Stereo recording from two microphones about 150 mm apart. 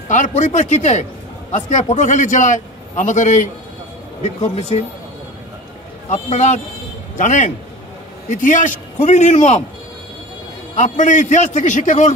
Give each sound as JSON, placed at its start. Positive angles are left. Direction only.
{"t": 0.1, "sound": "a man's voice", "side_deg": 55}
{"t": 6.0, "sound": "a man's voice", "side_deg": 50}
{"t": 10.8, "sound": "a man's voice", "side_deg": 55}